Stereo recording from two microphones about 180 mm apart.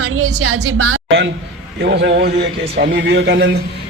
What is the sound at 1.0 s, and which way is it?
Speech, 85° right.